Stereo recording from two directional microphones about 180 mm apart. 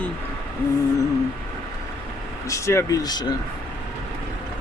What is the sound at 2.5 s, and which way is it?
Speech, 15° left (ahead or behind).